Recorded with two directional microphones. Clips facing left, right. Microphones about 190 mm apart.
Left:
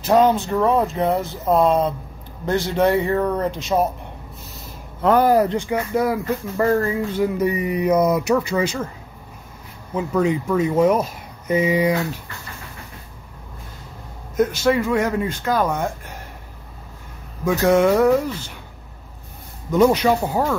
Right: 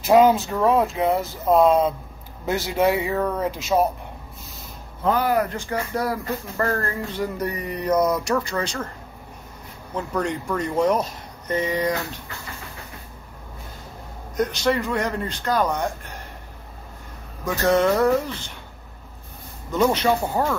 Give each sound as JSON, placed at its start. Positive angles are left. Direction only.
{"t": 0.0, "sound": "speech", "side_deg": -10}
{"t": 5.0, "sound": "speech", "side_deg": 75}
{"t": 5.7, "sound": "speech", "side_deg": 10}
{"t": 9.9, "sound": "speech", "side_deg": 5}
{"t": 14.3, "sound": "speech", "side_deg": 5}
{"t": 17.5, "sound": "speech", "side_deg": 10}
{"t": 19.9, "sound": "speech", "side_deg": 10}